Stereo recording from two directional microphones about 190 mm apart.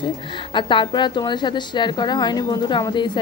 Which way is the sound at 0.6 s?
25° left (ahead or behind).